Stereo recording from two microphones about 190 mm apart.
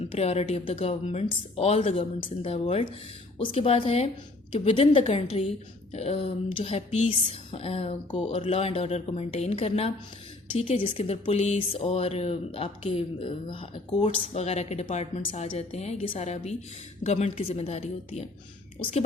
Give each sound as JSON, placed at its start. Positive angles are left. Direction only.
{"t": 0.0, "sound": "speech", "side_deg": 30}